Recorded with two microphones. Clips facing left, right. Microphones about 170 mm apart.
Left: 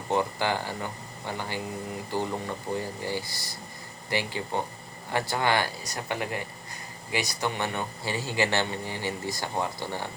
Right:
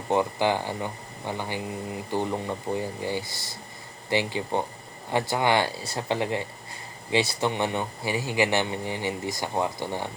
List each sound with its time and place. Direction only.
0.1 s speech: 20° right (ahead or behind)